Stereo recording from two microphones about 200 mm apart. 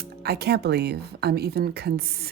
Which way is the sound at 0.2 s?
55° right (ahead or behind).